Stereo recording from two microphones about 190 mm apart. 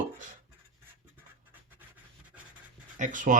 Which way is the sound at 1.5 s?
10° right (ahead or behind).